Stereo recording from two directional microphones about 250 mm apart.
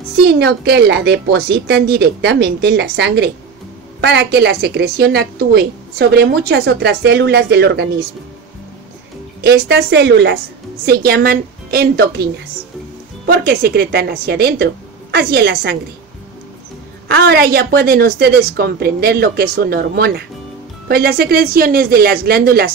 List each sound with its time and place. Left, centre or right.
0.2 s a woman's voice: right
9.4 s a woman's voice: right
17.1 s a woman's voice: right